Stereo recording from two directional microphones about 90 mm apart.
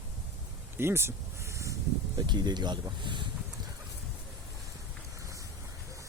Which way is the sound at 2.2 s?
55° right (ahead or behind).